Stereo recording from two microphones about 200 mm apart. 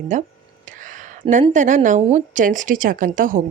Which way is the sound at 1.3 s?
40° right (ahead or behind).